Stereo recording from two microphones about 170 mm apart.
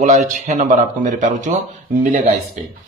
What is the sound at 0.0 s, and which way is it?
A man's voice, 45° right (ahead or behind).